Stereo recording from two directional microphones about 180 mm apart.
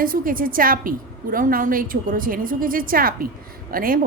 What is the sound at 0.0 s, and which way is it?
A woman's voice, 50° right (ahead or behind).